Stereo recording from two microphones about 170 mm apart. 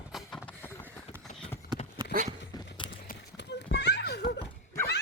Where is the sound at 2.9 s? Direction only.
80° left.